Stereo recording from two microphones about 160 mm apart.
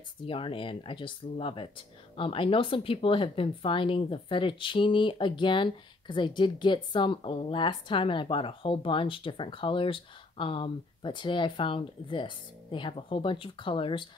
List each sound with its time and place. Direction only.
0.3 s speech: 35° left (ahead or behind)